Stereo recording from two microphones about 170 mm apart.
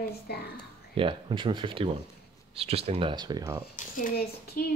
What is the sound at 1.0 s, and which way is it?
Speech, 30° right (ahead or behind).